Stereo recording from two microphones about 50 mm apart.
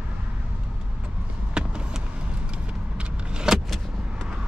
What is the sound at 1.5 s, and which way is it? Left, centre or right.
Vehicle, centre.